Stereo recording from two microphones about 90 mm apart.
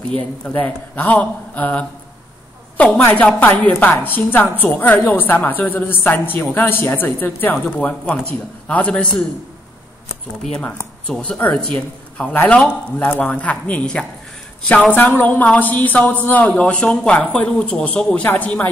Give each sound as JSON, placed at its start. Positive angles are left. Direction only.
{"t": 0.5, "sound": "a man's voice", "side_deg": 20}
{"t": 3.0, "sound": "a woman's voice", "side_deg": 20}
{"t": 11.1, "sound": "a man's voice", "side_deg": 10}